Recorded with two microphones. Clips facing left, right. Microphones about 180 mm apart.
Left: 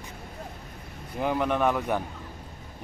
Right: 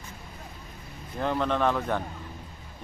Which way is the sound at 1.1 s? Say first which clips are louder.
Left 1 dB; 10° left (ahead or behind).